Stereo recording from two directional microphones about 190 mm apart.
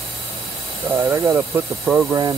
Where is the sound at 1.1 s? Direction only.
15° right (ahead or behind).